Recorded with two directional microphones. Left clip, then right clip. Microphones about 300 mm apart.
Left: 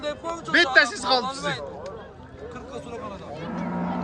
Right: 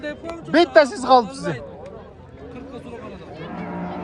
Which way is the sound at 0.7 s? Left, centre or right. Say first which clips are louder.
Right 5 dB; centre.